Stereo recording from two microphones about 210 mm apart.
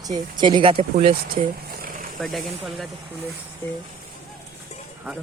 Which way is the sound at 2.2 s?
Centre (ahead or behind).